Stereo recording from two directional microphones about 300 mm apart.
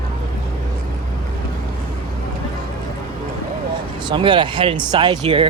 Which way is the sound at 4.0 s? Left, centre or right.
Centre.